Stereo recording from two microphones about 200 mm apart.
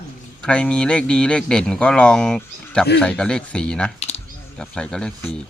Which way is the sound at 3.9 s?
30° left (ahead or behind).